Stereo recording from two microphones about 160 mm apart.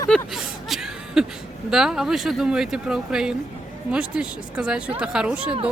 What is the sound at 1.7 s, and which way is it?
Speech, 5° right (ahead or behind).